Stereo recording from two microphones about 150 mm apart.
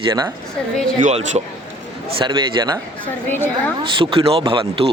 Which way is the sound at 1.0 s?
55° right (ahead or behind).